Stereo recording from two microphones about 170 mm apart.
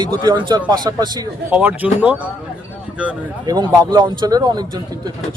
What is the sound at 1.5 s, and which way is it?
Speech, 10° right (ahead or behind).